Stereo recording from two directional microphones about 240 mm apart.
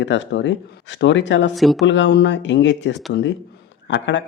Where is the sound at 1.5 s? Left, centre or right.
Centre.